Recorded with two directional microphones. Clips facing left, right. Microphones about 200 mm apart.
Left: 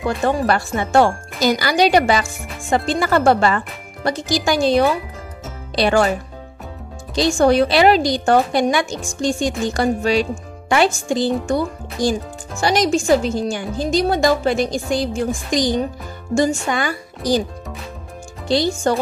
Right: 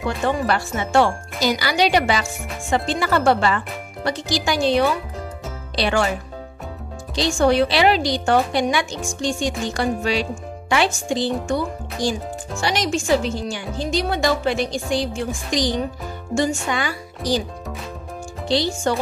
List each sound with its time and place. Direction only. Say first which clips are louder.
0.3 s speech: left 2 dB; 45° left (ahead or behind)
7.3 s speech: left 2 dB; 45° left (ahead or behind)
18.5 s speech: left 3 dB; 45° left (ahead or behind)